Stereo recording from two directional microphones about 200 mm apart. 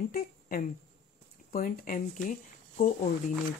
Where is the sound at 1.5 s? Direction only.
45° left (ahead or behind).